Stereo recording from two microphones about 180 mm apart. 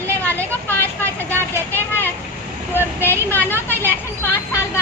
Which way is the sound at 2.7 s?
10° left (ahead or behind).